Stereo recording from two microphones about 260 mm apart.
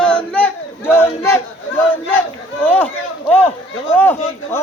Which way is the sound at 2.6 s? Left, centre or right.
Centre.